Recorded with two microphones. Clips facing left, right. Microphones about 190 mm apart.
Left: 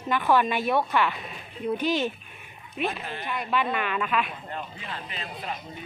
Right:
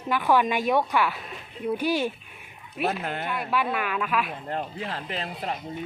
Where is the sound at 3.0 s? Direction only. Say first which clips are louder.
Right 5 dB; 55° right (ahead or behind).